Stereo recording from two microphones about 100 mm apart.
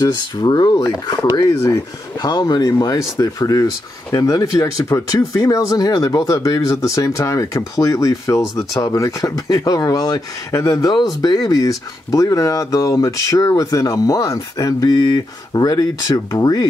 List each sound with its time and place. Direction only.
0.0 s speech: 45° left (ahead or behind)